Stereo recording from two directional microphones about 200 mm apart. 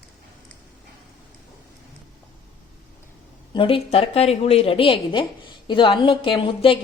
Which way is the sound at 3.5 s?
25° left (ahead or behind).